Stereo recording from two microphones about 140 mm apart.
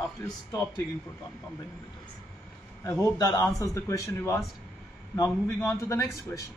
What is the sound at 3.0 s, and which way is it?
Speech, 30° left (ahead or behind).